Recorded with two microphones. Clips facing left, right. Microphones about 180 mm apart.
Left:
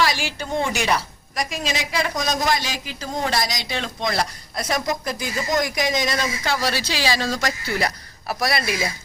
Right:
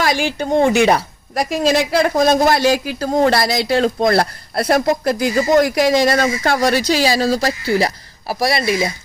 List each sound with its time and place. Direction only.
0.0 s speech: 50° right (ahead or behind)
3.8 s speech: 50° right (ahead or behind); by 8.9 s 25° right (ahead or behind)